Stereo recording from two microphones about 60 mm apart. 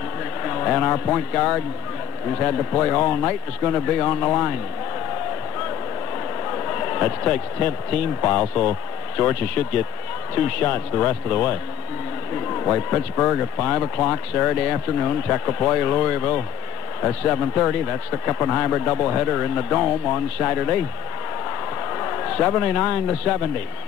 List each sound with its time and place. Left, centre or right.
0.4 s speech: centre
6.4 s a sound: centre
7.5 s speech: left
12.5 s speech: centre
21.9 s a man's voice: centre